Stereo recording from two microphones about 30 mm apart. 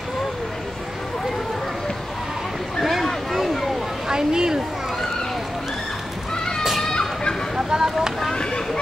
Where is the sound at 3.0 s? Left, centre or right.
Centre.